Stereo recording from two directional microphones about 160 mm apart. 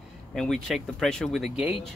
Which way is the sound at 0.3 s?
Centre (ahead or behind).